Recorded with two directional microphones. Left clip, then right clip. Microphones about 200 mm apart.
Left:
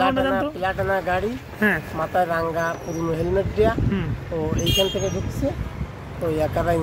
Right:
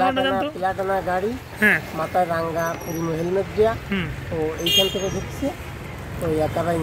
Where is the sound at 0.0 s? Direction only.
30° left (ahead or behind).